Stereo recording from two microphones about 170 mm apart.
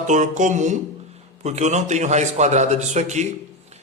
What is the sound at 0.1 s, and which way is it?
A man's voice, 45° right (ahead or behind).